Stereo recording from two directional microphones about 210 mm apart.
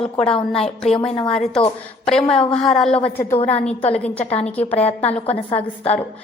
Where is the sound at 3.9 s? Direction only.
5° left (ahead or behind).